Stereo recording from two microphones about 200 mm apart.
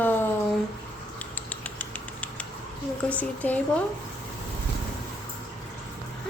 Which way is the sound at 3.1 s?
10° left (ahead or behind).